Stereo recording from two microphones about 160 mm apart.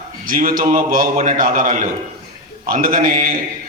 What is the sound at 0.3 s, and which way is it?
A man's voice, 60° right (ahead or behind).